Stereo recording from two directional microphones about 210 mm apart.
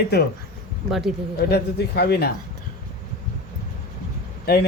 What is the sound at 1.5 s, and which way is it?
Speech, 50° left (ahead or behind).